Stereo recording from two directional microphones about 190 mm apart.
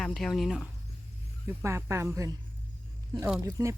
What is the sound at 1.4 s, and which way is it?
Speech, 15° right (ahead or behind).